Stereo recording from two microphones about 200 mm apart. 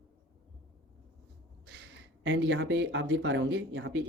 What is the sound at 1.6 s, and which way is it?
Speech, 60° right (ahead or behind).